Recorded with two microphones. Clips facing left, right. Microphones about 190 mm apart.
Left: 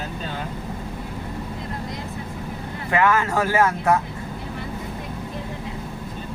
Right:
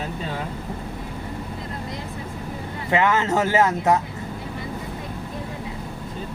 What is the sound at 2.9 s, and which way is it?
Speech, 20° right (ahead or behind).